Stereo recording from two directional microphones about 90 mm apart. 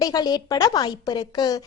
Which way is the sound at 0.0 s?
45° left (ahead or behind).